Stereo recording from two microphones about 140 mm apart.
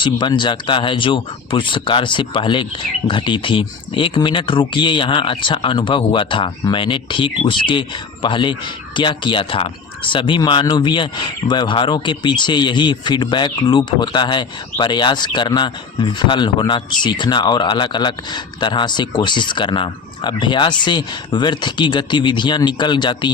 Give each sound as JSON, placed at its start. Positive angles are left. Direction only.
{"t": 0.0, "sound": "speech", "side_deg": 35}